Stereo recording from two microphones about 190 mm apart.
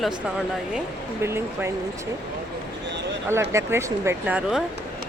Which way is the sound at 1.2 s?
15° right (ahead or behind).